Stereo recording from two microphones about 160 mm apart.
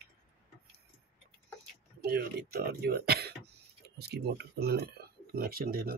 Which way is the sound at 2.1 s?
85° right.